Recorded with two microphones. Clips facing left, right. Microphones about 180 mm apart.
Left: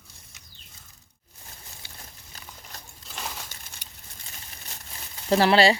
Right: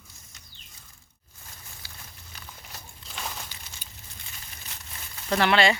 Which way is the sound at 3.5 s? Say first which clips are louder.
Even; 50° left (ahead or behind).